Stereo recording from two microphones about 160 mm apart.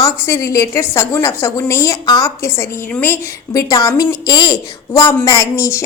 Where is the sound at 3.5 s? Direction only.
20° left (ahead or behind).